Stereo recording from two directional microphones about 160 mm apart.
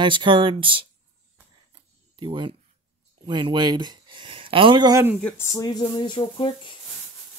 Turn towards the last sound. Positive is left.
turn(degrees=30)  # may be behind; listen again after turning